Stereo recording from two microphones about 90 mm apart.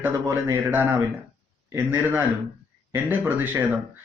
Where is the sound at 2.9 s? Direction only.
20° right (ahead or behind).